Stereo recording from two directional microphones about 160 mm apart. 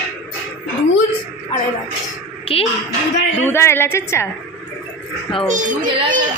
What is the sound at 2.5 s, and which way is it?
Speech, 35° left (ahead or behind).